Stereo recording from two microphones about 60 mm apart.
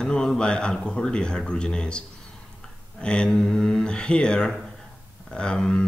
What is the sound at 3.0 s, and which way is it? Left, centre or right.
Speech, centre.